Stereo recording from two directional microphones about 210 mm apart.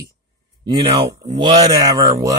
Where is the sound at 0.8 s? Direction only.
25° right (ahead or behind).